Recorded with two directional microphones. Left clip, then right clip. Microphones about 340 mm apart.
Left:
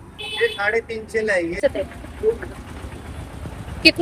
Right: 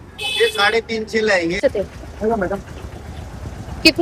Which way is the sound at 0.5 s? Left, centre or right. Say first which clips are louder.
Right 5 dB; centre.